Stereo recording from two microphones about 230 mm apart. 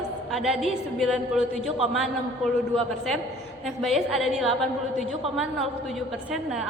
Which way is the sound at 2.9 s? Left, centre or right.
Centre.